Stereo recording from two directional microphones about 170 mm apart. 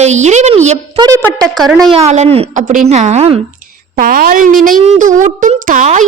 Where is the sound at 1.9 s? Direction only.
40° right (ahead or behind).